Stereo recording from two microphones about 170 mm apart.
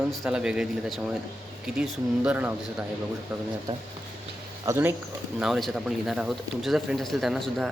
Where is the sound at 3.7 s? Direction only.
35° right (ahead or behind).